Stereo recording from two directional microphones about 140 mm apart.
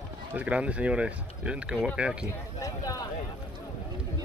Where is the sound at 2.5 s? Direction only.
25° left (ahead or behind).